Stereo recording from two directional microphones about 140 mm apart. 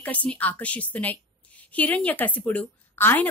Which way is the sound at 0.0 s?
10° left (ahead or behind).